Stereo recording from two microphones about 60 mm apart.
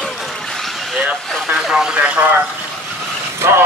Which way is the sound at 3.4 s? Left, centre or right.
Right.